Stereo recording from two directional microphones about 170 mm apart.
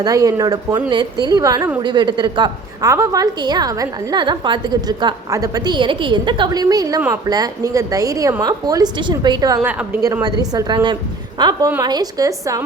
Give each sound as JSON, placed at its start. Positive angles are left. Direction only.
{"t": 0.0, "sound": "a woman's voice", "side_deg": -20}
{"t": 9.6, "sound": "a woman's voice", "side_deg": -10}